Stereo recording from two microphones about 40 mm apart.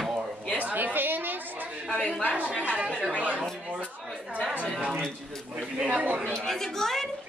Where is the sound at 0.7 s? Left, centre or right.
Right.